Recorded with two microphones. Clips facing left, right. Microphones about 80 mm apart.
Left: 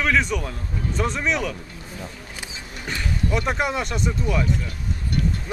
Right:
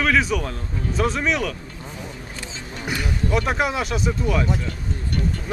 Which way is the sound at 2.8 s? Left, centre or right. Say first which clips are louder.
Right 3 dB; centre.